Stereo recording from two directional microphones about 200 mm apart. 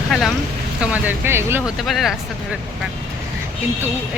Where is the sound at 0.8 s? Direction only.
5° right (ahead or behind).